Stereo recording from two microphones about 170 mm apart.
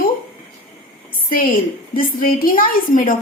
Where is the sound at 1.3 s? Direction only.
55° left (ahead or behind).